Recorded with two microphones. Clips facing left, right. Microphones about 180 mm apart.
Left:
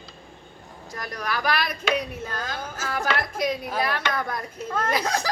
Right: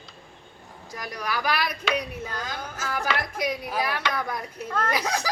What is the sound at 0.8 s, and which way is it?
Speech, 10° right (ahead or behind).